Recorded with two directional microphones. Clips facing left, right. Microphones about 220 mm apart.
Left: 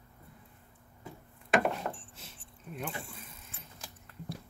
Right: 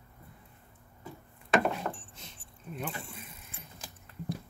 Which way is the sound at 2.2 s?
Centre (ahead or behind).